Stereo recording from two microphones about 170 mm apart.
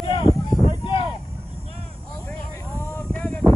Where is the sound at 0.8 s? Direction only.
30° left (ahead or behind).